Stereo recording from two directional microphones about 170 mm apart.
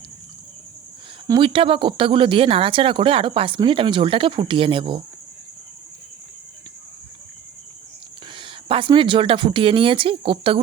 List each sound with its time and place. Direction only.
1.3 s speech: 30° right (ahead or behind)
8.4 s speech: 30° right (ahead or behind)